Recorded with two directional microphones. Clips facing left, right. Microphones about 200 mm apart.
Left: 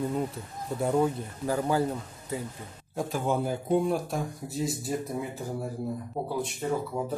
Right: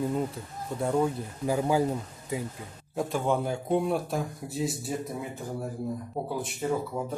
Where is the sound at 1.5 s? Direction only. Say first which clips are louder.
Right 1 dB; 10° right (ahead or behind).